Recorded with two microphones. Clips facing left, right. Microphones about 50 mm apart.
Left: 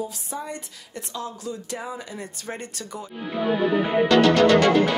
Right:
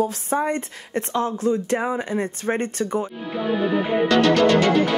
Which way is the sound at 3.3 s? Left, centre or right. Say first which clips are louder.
Left 1 dB; centre.